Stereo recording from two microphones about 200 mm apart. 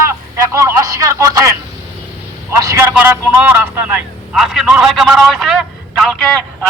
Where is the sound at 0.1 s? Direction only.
15° right (ahead or behind).